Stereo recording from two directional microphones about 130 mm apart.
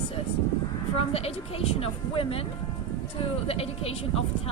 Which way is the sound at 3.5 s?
50° left (ahead or behind).